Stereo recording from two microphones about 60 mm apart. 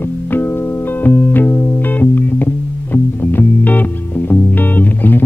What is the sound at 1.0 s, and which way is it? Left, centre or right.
Music, left.